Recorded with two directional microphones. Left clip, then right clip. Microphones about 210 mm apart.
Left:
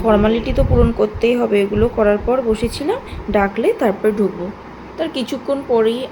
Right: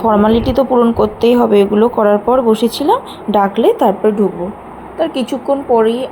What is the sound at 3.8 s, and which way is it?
Speech, centre (ahead or behind).